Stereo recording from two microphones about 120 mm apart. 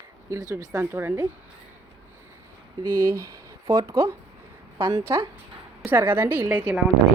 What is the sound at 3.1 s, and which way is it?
Speech, 25° right (ahead or behind).